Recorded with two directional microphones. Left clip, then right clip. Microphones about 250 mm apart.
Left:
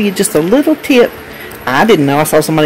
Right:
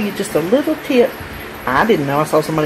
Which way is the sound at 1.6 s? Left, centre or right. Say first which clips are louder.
Left 5 dB; left.